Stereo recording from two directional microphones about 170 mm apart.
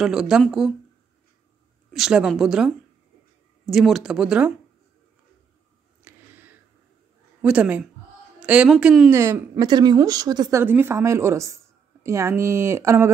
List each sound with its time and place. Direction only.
0.0 s a woman's voice: 5° right (ahead or behind)
1.9 s a woman's voice: 5° right (ahead or behind)
3.7 s a woman's voice: centre (ahead or behind)
6.0 s a sound: 10° right (ahead or behind)
7.4 s a woman's voice: 5° right (ahead or behind)
9.1 s speech: 15° right (ahead or behind)
10.6 s a woman's voice: 10° right (ahead or behind)